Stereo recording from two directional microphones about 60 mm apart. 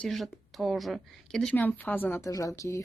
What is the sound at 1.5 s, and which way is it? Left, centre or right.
Speech, left.